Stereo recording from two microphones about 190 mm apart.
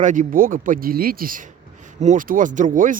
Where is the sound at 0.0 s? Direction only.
40° right (ahead or behind).